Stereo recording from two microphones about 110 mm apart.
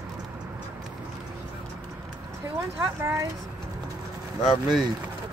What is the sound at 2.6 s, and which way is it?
Speech, 25° right (ahead or behind).